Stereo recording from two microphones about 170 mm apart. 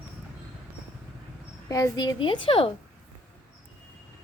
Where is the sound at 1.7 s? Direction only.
20° left (ahead or behind).